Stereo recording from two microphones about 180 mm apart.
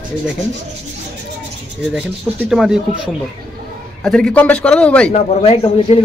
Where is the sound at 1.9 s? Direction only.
5° right (ahead or behind).